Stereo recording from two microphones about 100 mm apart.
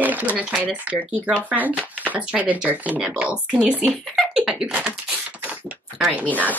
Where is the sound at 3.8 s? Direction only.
Centre (ahead or behind).